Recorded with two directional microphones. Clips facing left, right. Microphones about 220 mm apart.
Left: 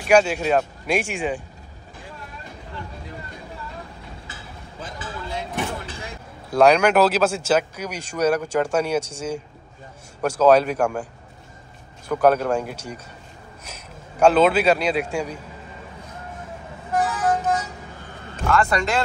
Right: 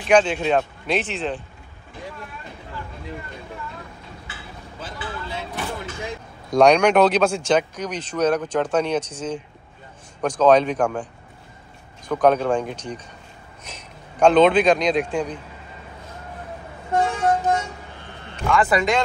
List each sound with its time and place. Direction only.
0.0 s speech: 10° left (ahead or behind)
4.3 s a sound: 40° left (ahead or behind)
5.0 s vehicle: 45° left (ahead or behind)
6.5 s speech: 5° left (ahead or behind)
12.1 s speech: 5° left (ahead or behind)
14.2 s speech: 5° left (ahead or behind)
16.9 s vehicle: 30° right (ahead or behind)
18.5 s speech: 5° right (ahead or behind)